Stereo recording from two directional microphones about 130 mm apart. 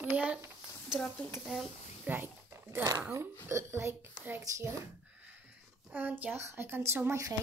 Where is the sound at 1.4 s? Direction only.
5° right (ahead or behind).